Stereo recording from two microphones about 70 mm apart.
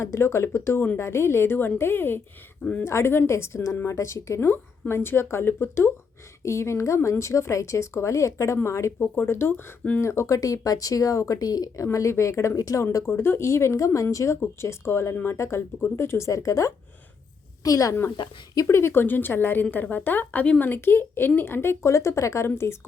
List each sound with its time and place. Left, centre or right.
0.0 s speech: left
6.4 s speech: left
11.9 s speech: left
13.1 s a woman's voice: left
18.2 s speech: left
18.5 s speech: left
20.7 s speech: left